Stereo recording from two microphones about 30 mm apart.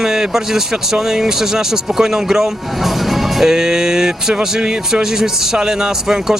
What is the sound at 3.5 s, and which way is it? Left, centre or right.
Speech, centre.